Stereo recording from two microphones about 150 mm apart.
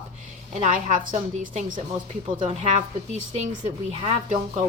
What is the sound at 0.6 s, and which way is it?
A woman's voice, 55° right (ahead or behind).